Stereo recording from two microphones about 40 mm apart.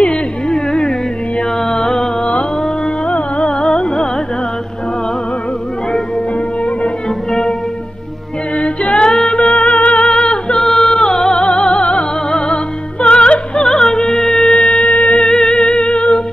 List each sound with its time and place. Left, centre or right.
0.0 s carnatic music: left
1.6 s mantra: centre
3.1 s music: left
8.5 s a capella: left
9.3 s music: left
10.0 s humming: left
10.6 s music: centre; by 13.7 s left
13.7 s music: centre
14.8 s music: left
15.2 s music: centre